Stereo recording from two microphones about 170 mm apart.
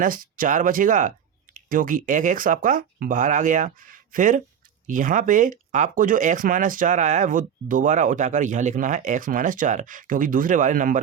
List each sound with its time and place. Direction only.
0.0 s speech: 55° right (ahead or behind)